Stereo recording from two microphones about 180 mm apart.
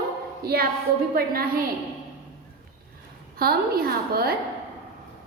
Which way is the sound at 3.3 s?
60° right (ahead or behind).